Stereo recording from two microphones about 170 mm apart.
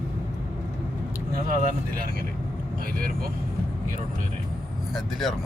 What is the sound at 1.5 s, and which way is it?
Speech, 60° right (ahead or behind).